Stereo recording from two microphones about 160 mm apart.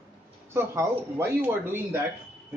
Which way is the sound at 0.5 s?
15° right (ahead or behind).